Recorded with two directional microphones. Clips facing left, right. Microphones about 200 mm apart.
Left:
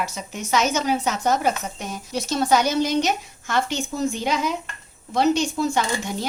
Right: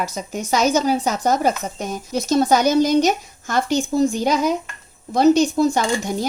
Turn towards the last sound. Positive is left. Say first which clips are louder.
# right 4 dB
turn(degrees=-40)  # may be behind; listen again after turning